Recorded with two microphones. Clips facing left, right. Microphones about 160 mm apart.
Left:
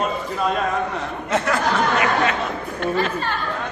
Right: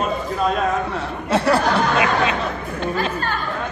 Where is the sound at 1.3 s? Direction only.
35° right (ahead or behind).